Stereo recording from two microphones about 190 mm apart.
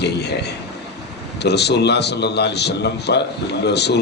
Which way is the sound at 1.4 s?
60° left (ahead or behind).